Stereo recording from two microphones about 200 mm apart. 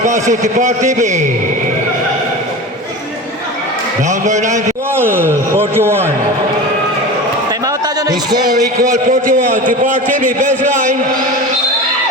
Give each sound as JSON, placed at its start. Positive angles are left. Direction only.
{"t": 0.0, "sound": "a man's voice", "side_deg": -35}
{"t": 4.1, "sound": "a man's voice", "side_deg": -35}
{"t": 4.9, "sound": "a man's voice", "side_deg": -10}
{"t": 8.3, "sound": "a man's voice", "side_deg": -20}
{"t": 8.8, "sound": "a man's voice", "side_deg": -45}